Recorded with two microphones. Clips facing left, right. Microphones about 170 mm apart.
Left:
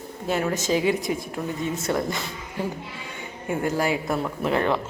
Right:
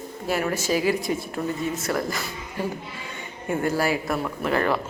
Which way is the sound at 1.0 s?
20° left (ahead or behind).